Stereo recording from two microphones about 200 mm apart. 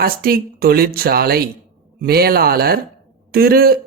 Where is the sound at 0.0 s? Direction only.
50° right (ahead or behind).